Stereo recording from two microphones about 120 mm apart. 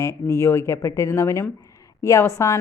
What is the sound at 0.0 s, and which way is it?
A woman's voice, 25° left (ahead or behind).